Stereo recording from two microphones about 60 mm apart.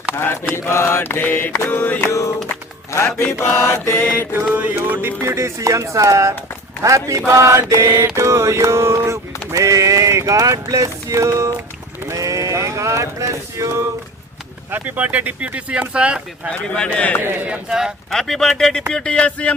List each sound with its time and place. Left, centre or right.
0.1 s mantra: left
1.0 s mantra: left
1.7 s a sound: left
2.9 s music: left
3.3 s mantra: left
4.7 s mantra: right
12.1 s a sound: right
14.7 s speech: right
16.5 s speech: centre
17.2 s speech: right
17.5 s speech: centre
18.1 s speech: centre